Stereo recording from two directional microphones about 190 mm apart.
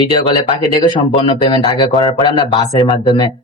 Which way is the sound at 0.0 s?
25° left (ahead or behind).